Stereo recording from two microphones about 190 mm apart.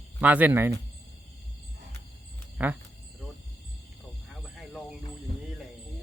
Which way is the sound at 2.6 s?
10° right (ahead or behind).